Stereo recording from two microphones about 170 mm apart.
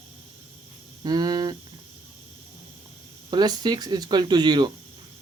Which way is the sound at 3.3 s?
25° right (ahead or behind).